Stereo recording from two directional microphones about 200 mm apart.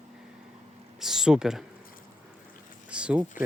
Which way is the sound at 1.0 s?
Centre (ahead or behind).